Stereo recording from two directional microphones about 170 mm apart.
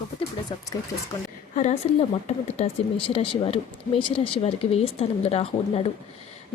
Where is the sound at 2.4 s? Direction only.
35° left (ahead or behind).